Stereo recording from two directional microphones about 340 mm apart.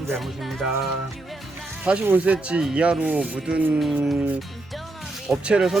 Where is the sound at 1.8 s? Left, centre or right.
Centre.